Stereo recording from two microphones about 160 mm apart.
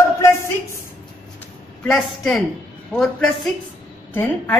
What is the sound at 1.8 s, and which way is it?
A woman's voice, 5° left (ahead or behind).